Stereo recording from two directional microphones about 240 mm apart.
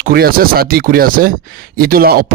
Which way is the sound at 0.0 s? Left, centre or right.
Right.